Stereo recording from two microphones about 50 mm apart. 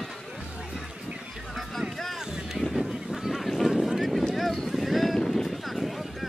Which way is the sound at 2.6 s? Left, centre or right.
Centre.